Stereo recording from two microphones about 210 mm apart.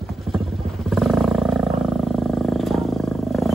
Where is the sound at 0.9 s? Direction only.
Centre (ahead or behind).